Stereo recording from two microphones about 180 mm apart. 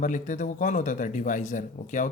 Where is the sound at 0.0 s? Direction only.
45° left (ahead or behind).